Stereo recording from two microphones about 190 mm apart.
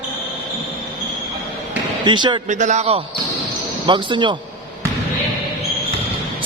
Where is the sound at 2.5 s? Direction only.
40° right (ahead or behind).